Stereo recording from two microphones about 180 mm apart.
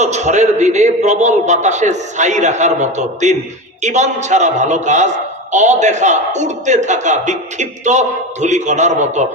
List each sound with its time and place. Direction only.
0.0 s a man's voice: 40° right (ahead or behind)